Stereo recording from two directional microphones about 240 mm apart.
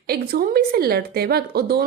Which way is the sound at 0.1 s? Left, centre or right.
Right.